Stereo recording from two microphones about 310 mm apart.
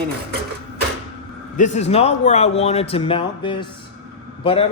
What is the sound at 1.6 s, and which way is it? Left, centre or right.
A man's voice, left.